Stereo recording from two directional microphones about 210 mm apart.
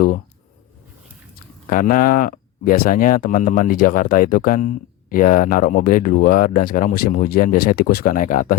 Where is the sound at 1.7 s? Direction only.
40° left (ahead or behind).